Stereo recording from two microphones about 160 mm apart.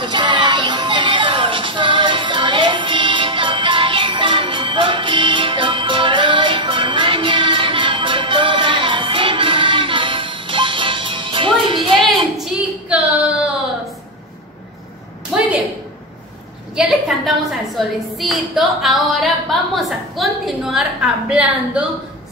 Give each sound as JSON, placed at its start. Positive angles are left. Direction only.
{"t": 0.0, "sound": "music", "side_deg": -30}
{"t": 15.3, "sound": "a sound", "side_deg": 0}
{"t": 16.7, "sound": "a woman's voice", "side_deg": 0}